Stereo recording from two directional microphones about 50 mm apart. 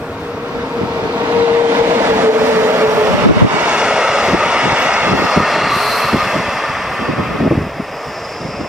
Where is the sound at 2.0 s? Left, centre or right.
Right.